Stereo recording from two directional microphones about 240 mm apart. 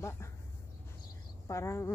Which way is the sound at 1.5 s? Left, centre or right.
Centre.